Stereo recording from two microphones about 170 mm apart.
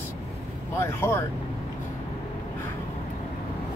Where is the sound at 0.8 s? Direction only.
15° left (ahead or behind).